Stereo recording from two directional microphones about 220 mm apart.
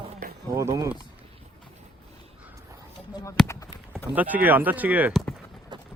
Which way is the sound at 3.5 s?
15° left (ahead or behind).